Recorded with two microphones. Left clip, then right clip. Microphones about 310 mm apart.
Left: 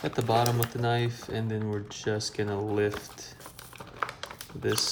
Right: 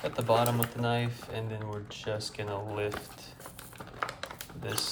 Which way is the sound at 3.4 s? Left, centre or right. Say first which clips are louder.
Left 1 dB; centre.